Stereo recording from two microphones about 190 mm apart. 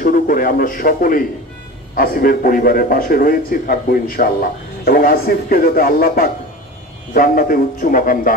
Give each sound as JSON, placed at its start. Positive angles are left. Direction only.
{"t": 0.0, "sound": "a man's voice", "side_deg": 45}